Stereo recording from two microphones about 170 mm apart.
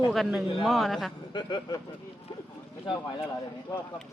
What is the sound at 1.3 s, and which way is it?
Speech, 25° left (ahead or behind).